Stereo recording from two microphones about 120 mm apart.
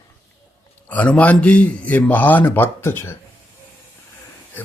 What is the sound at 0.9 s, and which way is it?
A man's voice, 10° left (ahead or behind).